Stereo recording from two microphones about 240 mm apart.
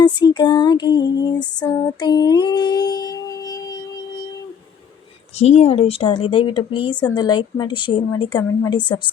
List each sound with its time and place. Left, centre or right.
0.0 s female singing: centre
5.4 s speech: left